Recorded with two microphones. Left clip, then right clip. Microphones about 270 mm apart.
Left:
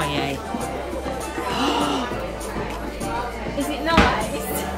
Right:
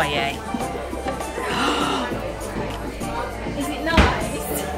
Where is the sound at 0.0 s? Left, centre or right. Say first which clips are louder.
Right 3 dB; centre.